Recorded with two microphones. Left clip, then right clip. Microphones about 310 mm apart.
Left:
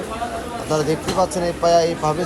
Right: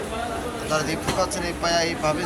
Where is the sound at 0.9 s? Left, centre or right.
Centre.